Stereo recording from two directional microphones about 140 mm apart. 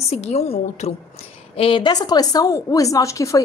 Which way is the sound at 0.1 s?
50° left (ahead or behind).